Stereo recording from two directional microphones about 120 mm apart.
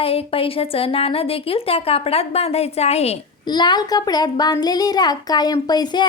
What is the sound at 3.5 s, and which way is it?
A child's voice, 35° left (ahead or behind).